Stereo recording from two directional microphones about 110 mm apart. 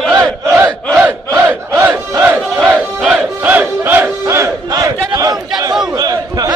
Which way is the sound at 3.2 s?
15° right (ahead or behind).